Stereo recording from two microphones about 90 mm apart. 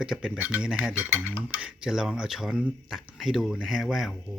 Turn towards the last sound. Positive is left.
turn(degrees=0)  # may be behind; listen again after turning